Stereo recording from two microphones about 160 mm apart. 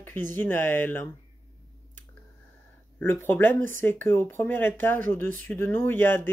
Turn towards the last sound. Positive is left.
turn(degrees=15)  # may be behind; listen again after turning